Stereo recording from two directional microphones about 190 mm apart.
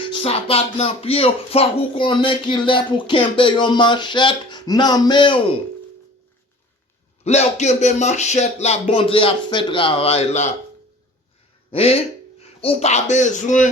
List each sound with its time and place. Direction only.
0.1 s speech: 30° left (ahead or behind)
7.3 s speech: 35° left (ahead or behind)
11.7 s speech: 30° left (ahead or behind)